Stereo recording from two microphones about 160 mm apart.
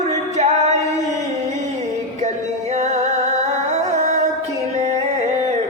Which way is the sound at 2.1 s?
45° right (ahead or behind).